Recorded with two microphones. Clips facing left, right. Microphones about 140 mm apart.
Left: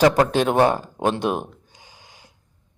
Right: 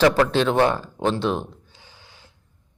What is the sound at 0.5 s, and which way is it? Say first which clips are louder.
Gasp: left 2 dB; 15° left (ahead or behind).